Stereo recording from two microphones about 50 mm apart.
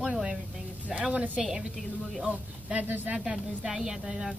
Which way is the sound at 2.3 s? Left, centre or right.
Right.